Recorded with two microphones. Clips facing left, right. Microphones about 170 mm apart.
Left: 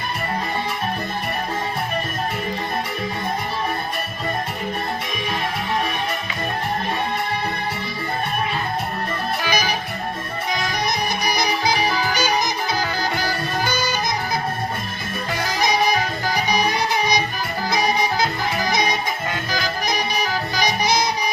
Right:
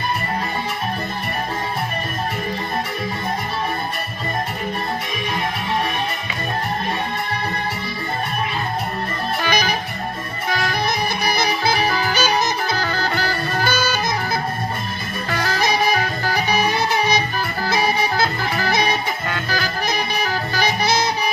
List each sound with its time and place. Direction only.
9.4 s music: 10° left (ahead or behind)
11.3 s music: 15° left (ahead or behind)
16.2 s music: 15° left (ahead or behind)